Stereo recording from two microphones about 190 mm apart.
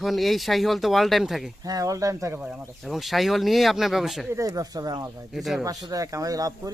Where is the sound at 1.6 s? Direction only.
20° right (ahead or behind).